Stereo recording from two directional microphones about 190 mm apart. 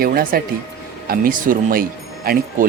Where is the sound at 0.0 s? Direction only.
50° right (ahead or behind).